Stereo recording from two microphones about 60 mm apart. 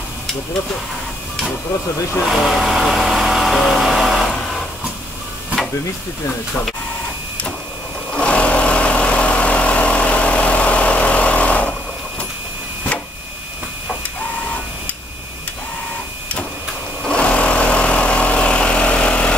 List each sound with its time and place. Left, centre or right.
2.2 s speech: centre
4.3 s vehicle: centre
8.1 s vehicle: centre
17.0 s lawn mower: centre